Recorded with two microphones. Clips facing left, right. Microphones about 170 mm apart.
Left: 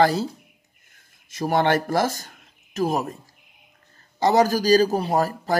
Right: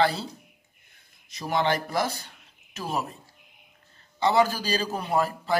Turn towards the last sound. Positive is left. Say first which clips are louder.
# left 3 dB
turn(degrees=40)  # may be behind; listen again after turning